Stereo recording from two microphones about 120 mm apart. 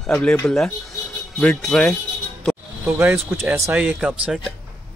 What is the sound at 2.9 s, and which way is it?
Speech, 20° right (ahead or behind).